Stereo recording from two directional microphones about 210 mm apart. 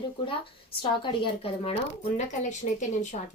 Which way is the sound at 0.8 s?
25° left (ahead or behind).